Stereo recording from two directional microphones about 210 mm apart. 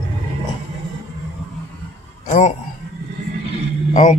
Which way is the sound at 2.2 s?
35° left (ahead or behind).